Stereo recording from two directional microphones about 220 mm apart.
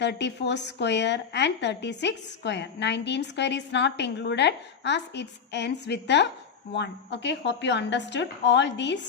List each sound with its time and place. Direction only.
0.0 s a woman's voice: 50° left (ahead or behind)